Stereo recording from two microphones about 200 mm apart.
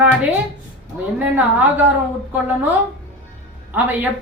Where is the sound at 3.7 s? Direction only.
10° right (ahead or behind).